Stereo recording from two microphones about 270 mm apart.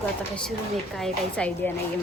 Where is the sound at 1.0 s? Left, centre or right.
Centre.